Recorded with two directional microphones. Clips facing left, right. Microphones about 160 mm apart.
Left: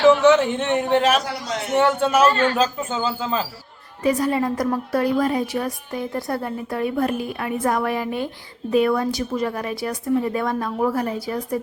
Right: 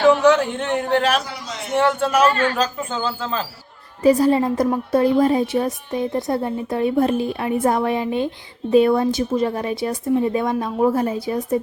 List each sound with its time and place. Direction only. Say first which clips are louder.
0.3 s a man's voice: even; centre (ahead or behind)
4.0 s a woman's voice: right 5 dB; 30° right (ahead or behind)